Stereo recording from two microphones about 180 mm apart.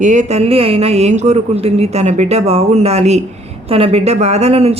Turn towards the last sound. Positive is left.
turn(degrees=-35)  # may be behind; listen again after turning